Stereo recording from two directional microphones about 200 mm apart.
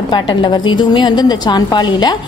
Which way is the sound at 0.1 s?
20° left (ahead or behind).